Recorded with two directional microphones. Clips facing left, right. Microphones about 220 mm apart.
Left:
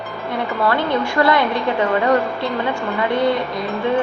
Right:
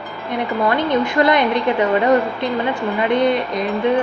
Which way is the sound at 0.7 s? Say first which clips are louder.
Right 1 dB; 20° right (ahead or behind).